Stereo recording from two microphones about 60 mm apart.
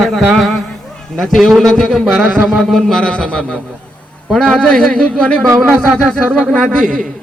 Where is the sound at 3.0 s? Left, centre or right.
Centre.